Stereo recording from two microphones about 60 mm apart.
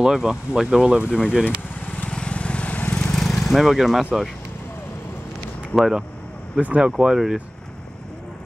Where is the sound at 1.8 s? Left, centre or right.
Left.